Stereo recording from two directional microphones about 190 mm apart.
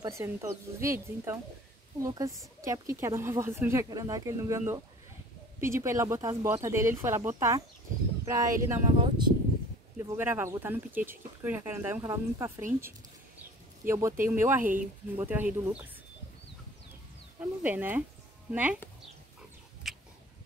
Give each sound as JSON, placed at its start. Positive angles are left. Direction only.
{"t": 0.0, "sound": "speech", "side_deg": -15}
{"t": 2.0, "sound": "speech", "side_deg": -15}
{"t": 9.9, "sound": "speech", "side_deg": -15}
{"t": 13.8, "sound": "speech", "side_deg": -15}
{"t": 14.6, "sound": "speech", "side_deg": -45}
{"t": 15.1, "sound": "speech", "side_deg": -10}
{"t": 17.4, "sound": "speech", "side_deg": -10}
{"t": 19.8, "sound": "a sound", "side_deg": 0}